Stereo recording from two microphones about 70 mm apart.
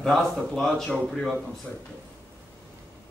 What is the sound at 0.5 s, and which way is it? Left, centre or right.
Speech, centre.